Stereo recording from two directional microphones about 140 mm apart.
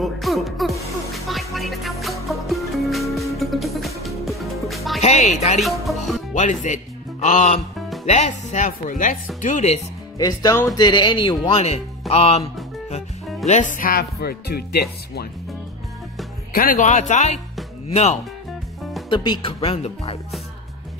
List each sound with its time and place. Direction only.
0.0 s music: centre (ahead or behind)
5.0 s speech: 50° left (ahead or behind)
5.6 s music: centre (ahead or behind)
6.3 s speech: 60° left (ahead or behind)
9.4 s speech: 55° left (ahead or behind)
10.1 s speech: 25° left (ahead or behind); by 12.4 s 45° left (ahead or behind)
13.5 s speech: 60° left (ahead or behind); by 14.9 s 90° left
16.5 s speech: 80° left; by 17.4 s 55° left (ahead or behind)
19.0 s speech: 35° left (ahead or behind)